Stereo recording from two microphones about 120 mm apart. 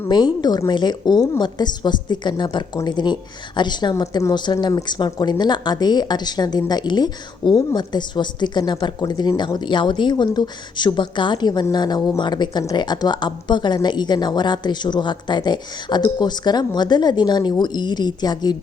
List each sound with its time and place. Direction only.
0.1 s a woman's voice: 40° left (ahead or behind)